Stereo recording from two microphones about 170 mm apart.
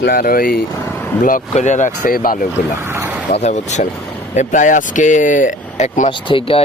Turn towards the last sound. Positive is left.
turn(degrees=35)  # may be behind; listen again after turning